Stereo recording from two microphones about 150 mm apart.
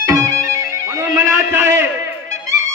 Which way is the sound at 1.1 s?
15° right (ahead or behind).